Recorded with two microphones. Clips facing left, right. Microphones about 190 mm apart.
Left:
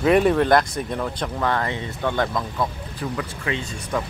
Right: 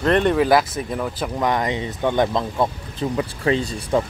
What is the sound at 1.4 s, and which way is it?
Speech, 15° right (ahead or behind).